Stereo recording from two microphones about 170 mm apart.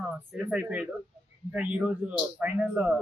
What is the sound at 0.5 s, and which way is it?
Speech, 10° right (ahead or behind).